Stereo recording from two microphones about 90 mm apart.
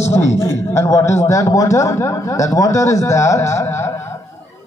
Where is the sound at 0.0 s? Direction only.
30° left (ahead or behind).